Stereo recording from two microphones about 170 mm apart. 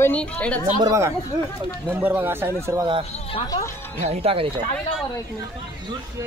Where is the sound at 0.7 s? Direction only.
20° right (ahead or behind).